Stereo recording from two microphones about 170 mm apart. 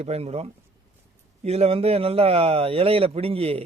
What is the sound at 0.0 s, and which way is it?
A man's voice, 40° right (ahead or behind).